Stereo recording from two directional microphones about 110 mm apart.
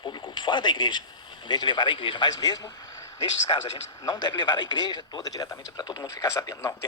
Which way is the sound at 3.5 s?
45° left (ahead or behind).